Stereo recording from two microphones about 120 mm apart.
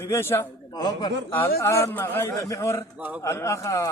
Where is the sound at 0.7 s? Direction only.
35° left (ahead or behind).